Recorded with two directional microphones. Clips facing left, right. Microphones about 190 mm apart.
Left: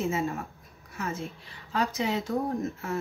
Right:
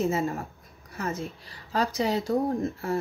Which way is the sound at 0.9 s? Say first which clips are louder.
Right 2 dB; 35° right (ahead or behind).